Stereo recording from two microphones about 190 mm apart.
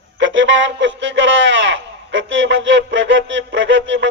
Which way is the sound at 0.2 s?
75° right (ahead or behind).